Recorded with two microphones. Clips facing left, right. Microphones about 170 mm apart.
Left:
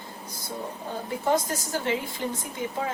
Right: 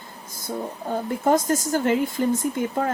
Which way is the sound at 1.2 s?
50° right (ahead or behind).